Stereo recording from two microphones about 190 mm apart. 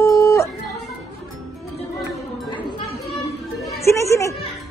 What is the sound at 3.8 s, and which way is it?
Speech, 15° left (ahead or behind).